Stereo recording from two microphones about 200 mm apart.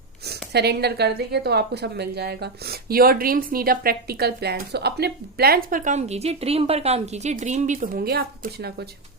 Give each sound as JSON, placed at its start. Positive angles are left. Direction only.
{"t": 0.3, "sound": "a woman's voice", "side_deg": -55}